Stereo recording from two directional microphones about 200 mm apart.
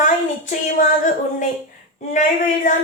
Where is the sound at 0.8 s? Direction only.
40° left (ahead or behind).